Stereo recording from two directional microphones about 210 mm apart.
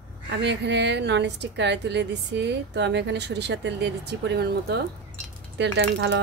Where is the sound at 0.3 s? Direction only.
55° right (ahead or behind).